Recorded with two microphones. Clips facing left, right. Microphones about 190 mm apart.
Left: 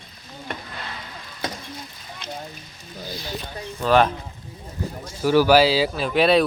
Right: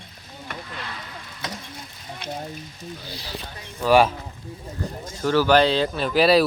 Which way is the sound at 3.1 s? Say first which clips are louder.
Left 4 dB; 30° right (ahead or behind).